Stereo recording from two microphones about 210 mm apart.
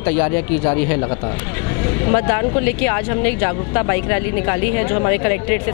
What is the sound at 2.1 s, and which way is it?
Speech, 20° left (ahead or behind).